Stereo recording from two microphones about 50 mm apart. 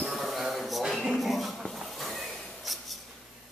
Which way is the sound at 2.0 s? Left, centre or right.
Centre.